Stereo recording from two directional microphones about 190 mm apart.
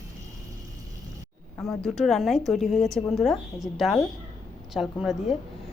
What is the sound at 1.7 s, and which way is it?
A woman's voice, centre (ahead or behind).